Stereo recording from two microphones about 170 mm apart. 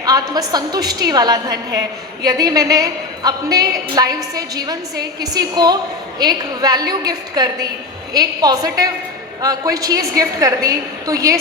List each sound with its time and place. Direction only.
0.0 s a woman's voice: 20° right (ahead or behind)